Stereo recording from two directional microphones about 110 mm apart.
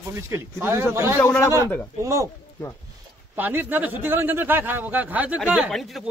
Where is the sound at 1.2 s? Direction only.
20° left (ahead or behind).